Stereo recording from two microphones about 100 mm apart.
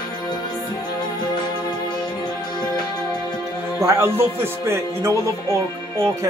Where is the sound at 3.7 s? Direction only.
30° right (ahead or behind).